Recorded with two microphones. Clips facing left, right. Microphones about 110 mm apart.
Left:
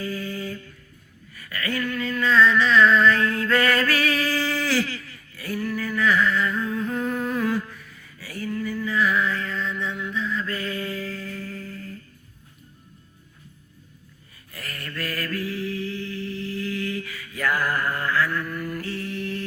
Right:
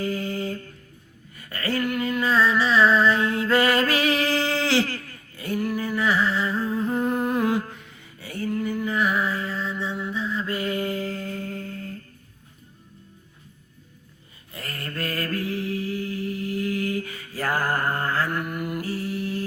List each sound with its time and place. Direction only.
0.0 s mantra: 35° right (ahead or behind)
1.3 s a sound: 30° right (ahead or behind)
2.2 s music: 40° right (ahead or behind); by 4.7 s 20° right (ahead or behind)
4.8 s a sound: 50° right (ahead or behind)
5.6 s a sound: 25° right (ahead or behind)
6.0 s humming: 35° right (ahead or behind)
6.8 s humming: 20° right (ahead or behind)
7.7 s a sound: 25° right (ahead or behind)
14.5 s mantra: 30° right (ahead or behind)
16.3 s mantra: 30° left (ahead or behind)
16.6 s mantra: 30° right (ahead or behind)
18.9 s mantra: 30° right (ahead or behind)